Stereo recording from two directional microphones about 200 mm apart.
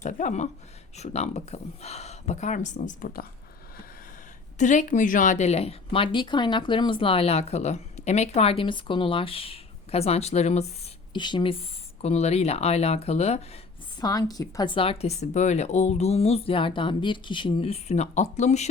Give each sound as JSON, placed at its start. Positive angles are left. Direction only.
{"t": 0.0, "sound": "speech", "side_deg": 35}
{"t": 4.5, "sound": "speech", "side_deg": 35}
{"t": 14.0, "sound": "speech", "side_deg": 20}